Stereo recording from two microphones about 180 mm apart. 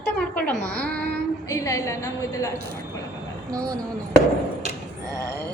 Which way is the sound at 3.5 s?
20° right (ahead or behind).